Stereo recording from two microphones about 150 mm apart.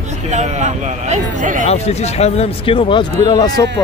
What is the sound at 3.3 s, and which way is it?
Speech, 25° left (ahead or behind).